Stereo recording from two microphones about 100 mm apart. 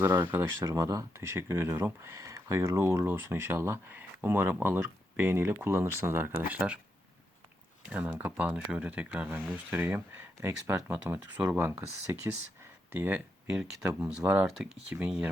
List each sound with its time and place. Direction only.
0.0 s speech: 20° right (ahead or behind)
6.5 s speech: 10° right (ahead or behind)
7.9 s speech: 15° right (ahead or behind)
13.5 s speech: 5° right (ahead or behind)